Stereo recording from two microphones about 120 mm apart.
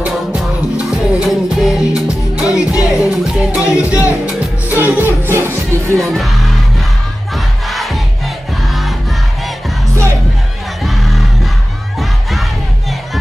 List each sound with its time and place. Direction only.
0.0 s music: 10° right (ahead or behind)
3.5 s music: 25° left (ahead or behind)
4.6 s music: 15° right (ahead or behind)
5.9 s music: centre (ahead or behind)
7.3 s crowd: centre (ahead or behind)
10.8 s music: centre (ahead or behind)
12.0 s crowd: centre (ahead or behind)